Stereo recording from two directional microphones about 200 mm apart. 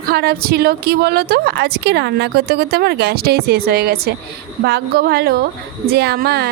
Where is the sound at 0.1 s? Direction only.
50° right (ahead or behind).